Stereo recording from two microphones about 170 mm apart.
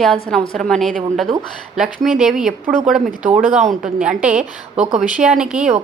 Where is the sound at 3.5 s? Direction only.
40° right (ahead or behind).